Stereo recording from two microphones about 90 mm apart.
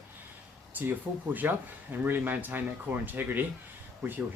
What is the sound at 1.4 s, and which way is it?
Speech, 20° right (ahead or behind).